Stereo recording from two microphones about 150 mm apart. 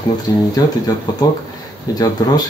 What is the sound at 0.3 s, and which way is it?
Speech, 20° left (ahead or behind).